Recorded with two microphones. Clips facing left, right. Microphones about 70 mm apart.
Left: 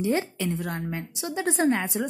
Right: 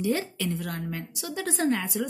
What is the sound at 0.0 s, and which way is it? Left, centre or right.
A woman's voice, left.